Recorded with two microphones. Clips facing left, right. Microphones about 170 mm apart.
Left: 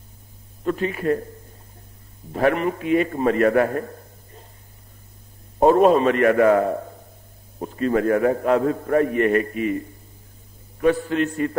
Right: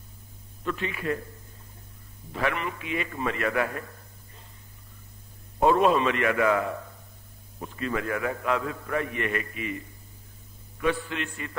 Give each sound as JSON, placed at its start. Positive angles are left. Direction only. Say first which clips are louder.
{"t": 0.7, "sound": "a man's voice", "louder": "left 8 dB", "side_deg": 40}
{"t": 2.3, "sound": "a man's voice", "louder": "left 9 dB", "side_deg": 40}
{"t": 5.6, "sound": "a man's voice", "louder": "left 6 dB", "side_deg": 45}